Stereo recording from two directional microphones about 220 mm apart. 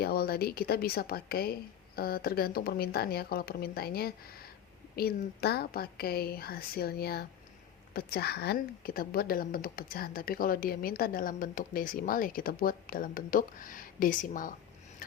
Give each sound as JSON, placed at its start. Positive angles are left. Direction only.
{"t": 0.0, "sound": "speech", "side_deg": 45}